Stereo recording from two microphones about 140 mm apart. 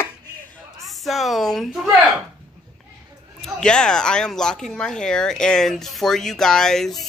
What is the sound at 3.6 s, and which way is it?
Speech, 5° left (ahead or behind).